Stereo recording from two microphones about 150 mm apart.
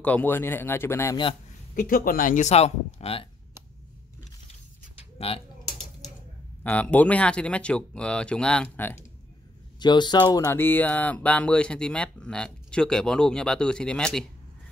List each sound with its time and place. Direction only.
0.0 s speech: 10° left (ahead or behind)
1.8 s speech: 75° left (ahead or behind); by 3.3 s 40° left (ahead or behind)
5.2 s speech: 40° left (ahead or behind)
6.6 s speech: 10° left (ahead or behind)
9.8 s speech: 30° left (ahead or behind)
10.6 s speech: 10° left (ahead or behind)